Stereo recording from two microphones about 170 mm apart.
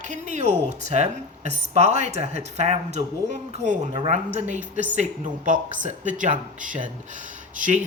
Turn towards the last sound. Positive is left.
turn(degrees=-50)  # may be behind; listen again after turning